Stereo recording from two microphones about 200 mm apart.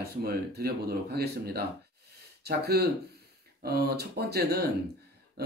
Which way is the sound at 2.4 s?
50° right (ahead or behind).